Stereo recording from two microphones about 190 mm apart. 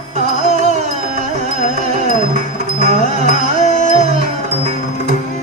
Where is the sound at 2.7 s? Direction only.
35° right (ahead or behind).